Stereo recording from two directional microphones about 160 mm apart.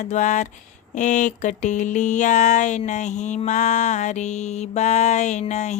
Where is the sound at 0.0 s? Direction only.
50° left (ahead or behind).